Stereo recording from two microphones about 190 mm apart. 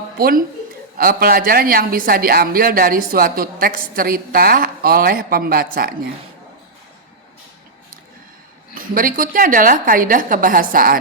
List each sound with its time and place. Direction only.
0.2 s a woman's voice: 50° right (ahead or behind)
8.7 s a woman's voice: 45° right (ahead or behind)